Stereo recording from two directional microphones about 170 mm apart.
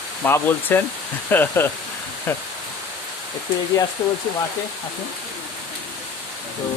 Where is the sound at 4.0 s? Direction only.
15° left (ahead or behind).